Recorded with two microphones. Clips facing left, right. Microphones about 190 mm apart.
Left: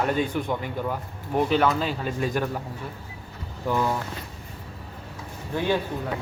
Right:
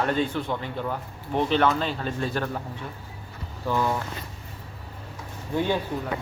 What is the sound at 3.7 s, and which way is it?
Speech, 10° left (ahead or behind).